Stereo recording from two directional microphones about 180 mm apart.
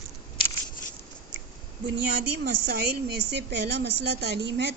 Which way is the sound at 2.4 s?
65° right (ahead or behind).